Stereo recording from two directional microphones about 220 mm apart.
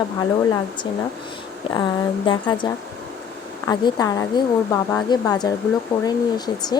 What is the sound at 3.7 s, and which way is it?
Speech, 20° left (ahead or behind).